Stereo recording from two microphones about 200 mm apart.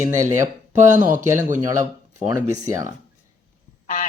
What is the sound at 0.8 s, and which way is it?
Speech, 40° right (ahead or behind).